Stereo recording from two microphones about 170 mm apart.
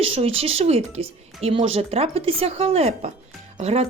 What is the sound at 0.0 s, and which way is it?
Speech, 35° right (ahead or behind).